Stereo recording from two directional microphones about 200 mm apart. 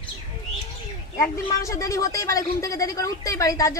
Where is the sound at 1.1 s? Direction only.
15° left (ahead or behind).